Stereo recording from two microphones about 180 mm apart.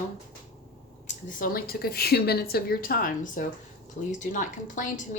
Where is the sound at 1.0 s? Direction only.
50° left (ahead or behind).